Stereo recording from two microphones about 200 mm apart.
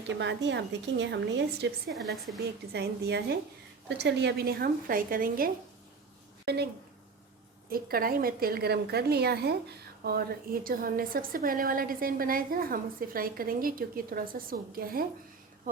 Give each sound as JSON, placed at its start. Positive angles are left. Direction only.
{"t": 0.2, "sound": "a woman's voice", "side_deg": -65}
{"t": 1.9, "sound": "a woman's voice", "side_deg": 0}
{"t": 2.4, "sound": "a woman's voice", "side_deg": -55}
{"t": 7.7, "sound": "a woman's voice", "side_deg": -45}